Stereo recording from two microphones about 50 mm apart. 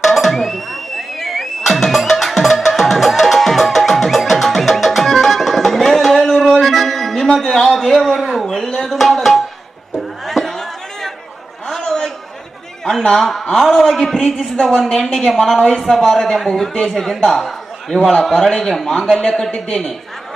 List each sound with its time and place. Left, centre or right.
0.0 s music: centre
8.0 s a sound: centre
10.2 s chatter: centre
13.0 s a woman's voice: centre
15.5 s a man's voice: centre
15.8 s a man's voice: centre